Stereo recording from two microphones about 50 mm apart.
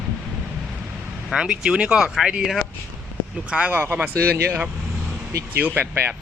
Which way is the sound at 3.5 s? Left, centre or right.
Right.